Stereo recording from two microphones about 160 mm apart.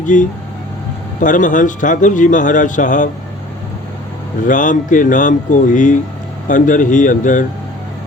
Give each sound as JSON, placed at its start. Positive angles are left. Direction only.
{"t": 0.0, "sound": "speech", "side_deg": 50}
{"t": 4.4, "sound": "speech", "side_deg": 55}